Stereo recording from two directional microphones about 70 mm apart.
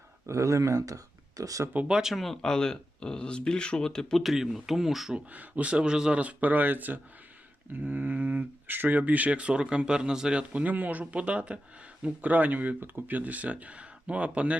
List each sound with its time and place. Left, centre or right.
0.3 s speech: right
1.7 s speech: centre
2.0 s speech: centre
5.3 s speech: right